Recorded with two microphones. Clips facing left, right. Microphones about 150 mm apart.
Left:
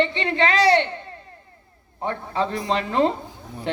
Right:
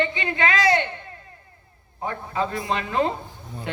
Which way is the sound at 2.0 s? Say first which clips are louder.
Left 2 dB; 30° left (ahead or behind).